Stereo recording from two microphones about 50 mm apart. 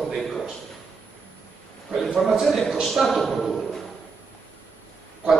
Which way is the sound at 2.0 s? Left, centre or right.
Centre.